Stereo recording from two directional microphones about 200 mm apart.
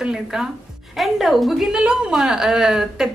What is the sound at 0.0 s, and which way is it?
A man's voice, 5° right (ahead or behind).